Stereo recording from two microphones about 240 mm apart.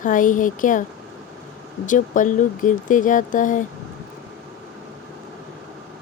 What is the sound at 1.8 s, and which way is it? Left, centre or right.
Speech, left.